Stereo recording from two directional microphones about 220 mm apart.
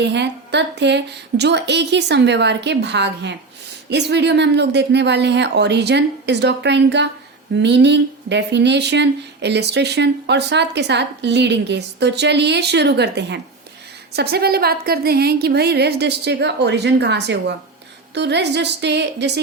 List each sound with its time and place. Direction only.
0.0 s speech: 50° right (ahead or behind)